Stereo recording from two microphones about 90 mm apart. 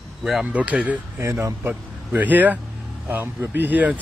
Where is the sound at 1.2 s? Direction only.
35° right (ahead or behind).